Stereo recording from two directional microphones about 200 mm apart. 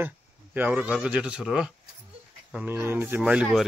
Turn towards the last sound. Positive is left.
turn(degrees=-5)  # may be behind; listen again after turning